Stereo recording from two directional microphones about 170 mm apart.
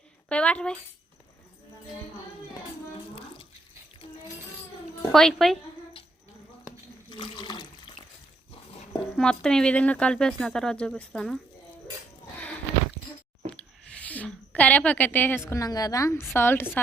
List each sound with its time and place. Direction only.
0.3 s a woman's voice: 5° left (ahead or behind)
5.1 s speech: centre (ahead or behind)
7.1 s water: 25° left (ahead or behind)
8.7 s dog: 35° left (ahead or behind)
9.1 s speech: 5° left (ahead or behind)
13.5 s a sound: 5° left (ahead or behind)
15.4 s a woman's voice: 20° left (ahead or behind)